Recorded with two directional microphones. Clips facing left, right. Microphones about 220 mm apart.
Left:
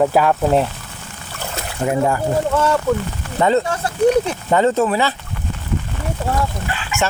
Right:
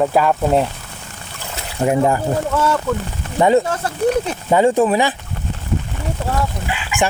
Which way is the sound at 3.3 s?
15° right (ahead or behind).